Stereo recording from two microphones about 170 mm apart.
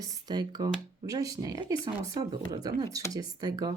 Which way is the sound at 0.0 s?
25° right (ahead or behind).